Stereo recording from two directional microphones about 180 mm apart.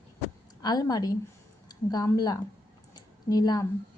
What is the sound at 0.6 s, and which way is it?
A woman's voice, 20° left (ahead or behind).